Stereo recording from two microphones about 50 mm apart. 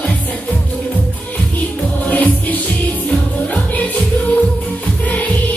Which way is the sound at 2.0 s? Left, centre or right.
Left.